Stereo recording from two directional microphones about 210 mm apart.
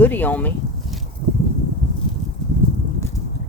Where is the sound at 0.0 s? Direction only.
10° left (ahead or behind).